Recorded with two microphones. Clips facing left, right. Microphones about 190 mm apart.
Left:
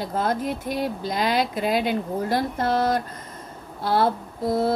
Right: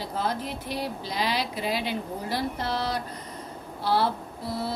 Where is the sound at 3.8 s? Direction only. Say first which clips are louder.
Left 4 dB; 50° left (ahead or behind).